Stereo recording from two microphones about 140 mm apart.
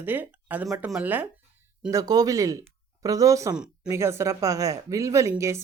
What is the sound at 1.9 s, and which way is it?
A woman's voice, 25° right (ahead or behind).